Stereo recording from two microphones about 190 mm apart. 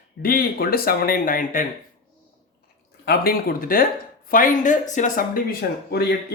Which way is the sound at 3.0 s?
55° left (ahead or behind).